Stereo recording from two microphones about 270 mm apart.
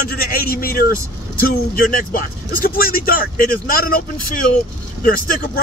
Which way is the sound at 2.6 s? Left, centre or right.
Left.